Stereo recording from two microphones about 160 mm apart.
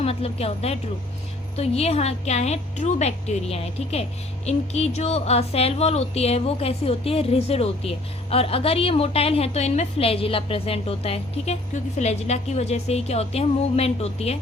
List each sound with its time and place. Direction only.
0.0 s speech: 40° left (ahead or behind)